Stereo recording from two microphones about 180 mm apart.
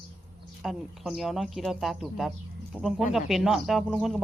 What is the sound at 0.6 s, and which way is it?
Speech, centre (ahead or behind).